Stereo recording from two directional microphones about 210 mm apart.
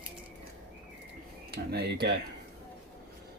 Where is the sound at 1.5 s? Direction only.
50° right (ahead or behind).